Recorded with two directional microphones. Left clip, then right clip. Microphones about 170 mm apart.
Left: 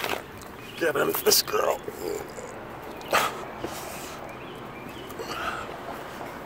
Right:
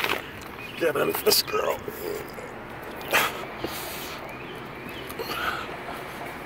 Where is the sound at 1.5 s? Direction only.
30° left (ahead or behind).